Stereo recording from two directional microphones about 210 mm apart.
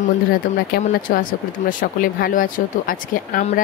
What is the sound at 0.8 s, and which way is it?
Speech, 45° left (ahead or behind).